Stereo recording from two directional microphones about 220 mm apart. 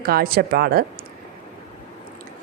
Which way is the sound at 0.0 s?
40° right (ahead or behind).